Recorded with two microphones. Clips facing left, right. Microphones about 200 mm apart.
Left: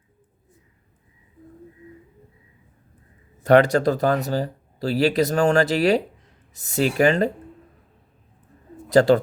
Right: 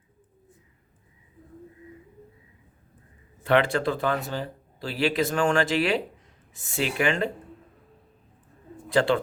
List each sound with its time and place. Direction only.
3.4 s speech: 40° left (ahead or behind)
8.9 s speech: 40° left (ahead or behind)